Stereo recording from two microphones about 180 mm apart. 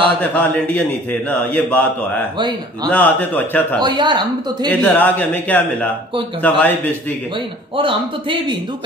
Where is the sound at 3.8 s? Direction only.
25° right (ahead or behind).